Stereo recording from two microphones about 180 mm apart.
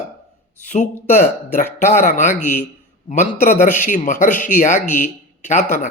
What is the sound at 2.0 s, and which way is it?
A man's voice, 45° left (ahead or behind).